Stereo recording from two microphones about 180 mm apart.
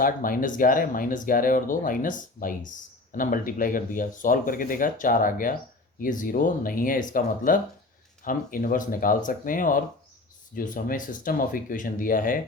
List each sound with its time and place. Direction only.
0.0 s speech: 50° left (ahead or behind)